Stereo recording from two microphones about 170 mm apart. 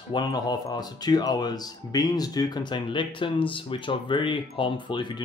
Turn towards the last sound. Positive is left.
turn(degrees=30)  # may be behind; listen again after turning